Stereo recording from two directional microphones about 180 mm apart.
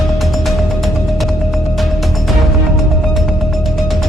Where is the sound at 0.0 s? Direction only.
Centre (ahead or behind).